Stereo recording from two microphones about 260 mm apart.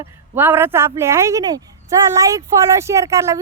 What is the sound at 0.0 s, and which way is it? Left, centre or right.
Speech, centre.